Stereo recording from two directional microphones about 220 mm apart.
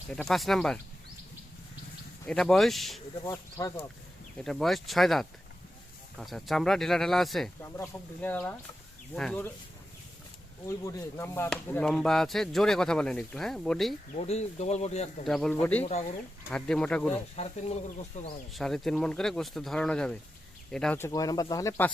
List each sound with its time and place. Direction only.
0.1 s speech: 5° left (ahead or behind)
2.2 s speech: centre (ahead or behind)
3.2 s speech: 15° left (ahead or behind)
4.4 s speech: centre (ahead or behind)
10.7 s speech: 10° left (ahead or behind)
14.2 s speech: 30° left (ahead or behind)
15.3 s speech: centre (ahead or behind)
15.8 s speech: 30° left (ahead or behind)
16.5 s speech: 5° left (ahead or behind)
17.3 s speech: 30° left (ahead or behind)
18.5 s speech: centre (ahead or behind)